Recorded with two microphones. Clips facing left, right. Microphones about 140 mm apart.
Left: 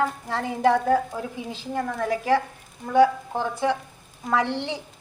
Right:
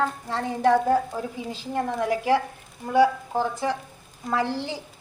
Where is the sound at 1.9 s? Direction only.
5° right (ahead or behind).